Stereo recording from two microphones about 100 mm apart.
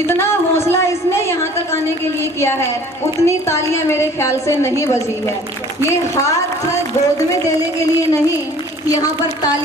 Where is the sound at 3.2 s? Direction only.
25° left (ahead or behind).